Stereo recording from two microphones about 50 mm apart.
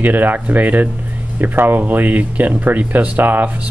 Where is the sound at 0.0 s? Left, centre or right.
Right.